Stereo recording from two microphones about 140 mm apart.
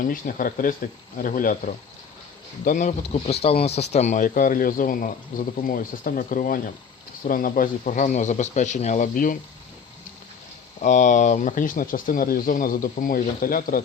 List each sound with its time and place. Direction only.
0.0 s speech: 70° left (ahead or behind)
2.6 s speech: 65° left (ahead or behind)
10.8 s speech: 65° left (ahead or behind); by 13.8 s 85° left